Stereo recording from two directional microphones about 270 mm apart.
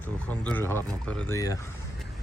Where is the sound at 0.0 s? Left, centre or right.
Centre.